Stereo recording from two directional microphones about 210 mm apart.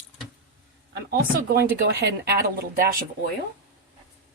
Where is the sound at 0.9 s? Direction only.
45° right (ahead or behind).